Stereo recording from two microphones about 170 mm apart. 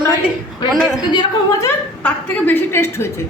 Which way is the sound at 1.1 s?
25° left (ahead or behind).